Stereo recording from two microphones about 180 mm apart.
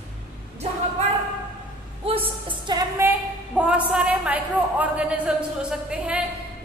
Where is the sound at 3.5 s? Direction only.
5° right (ahead or behind).